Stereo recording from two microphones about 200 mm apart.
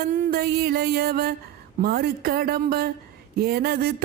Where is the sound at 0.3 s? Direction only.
50° right (ahead or behind).